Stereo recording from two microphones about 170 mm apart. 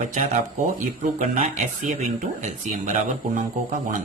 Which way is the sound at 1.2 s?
40° right (ahead or behind).